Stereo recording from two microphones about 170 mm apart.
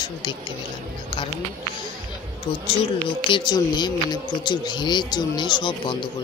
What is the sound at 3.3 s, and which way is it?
Speech, 25° left (ahead or behind).